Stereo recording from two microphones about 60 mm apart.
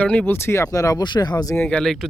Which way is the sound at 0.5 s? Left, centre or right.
Left.